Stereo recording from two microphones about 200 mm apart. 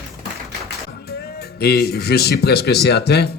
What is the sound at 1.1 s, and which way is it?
Speech, 50° left (ahead or behind).